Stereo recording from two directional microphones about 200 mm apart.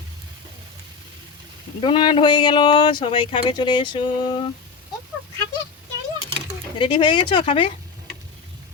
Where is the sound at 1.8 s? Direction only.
25° left (ahead or behind).